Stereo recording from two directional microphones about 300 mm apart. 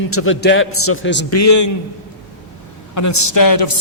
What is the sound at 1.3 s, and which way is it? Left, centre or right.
Speech, left.